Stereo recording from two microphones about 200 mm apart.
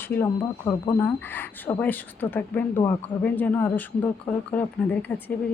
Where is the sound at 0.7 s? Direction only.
20° left (ahead or behind).